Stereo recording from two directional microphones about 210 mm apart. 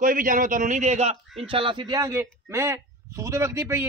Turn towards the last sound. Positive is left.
turn(degrees=-15)  # may be behind; listen again after turning